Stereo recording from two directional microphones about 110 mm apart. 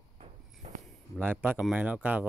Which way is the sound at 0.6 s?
70° right (ahead or behind).